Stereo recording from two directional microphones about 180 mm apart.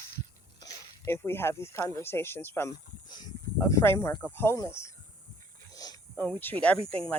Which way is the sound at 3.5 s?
20° left (ahead or behind).